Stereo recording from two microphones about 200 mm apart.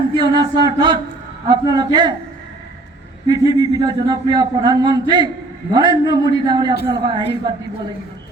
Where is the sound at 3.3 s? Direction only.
20° right (ahead or behind).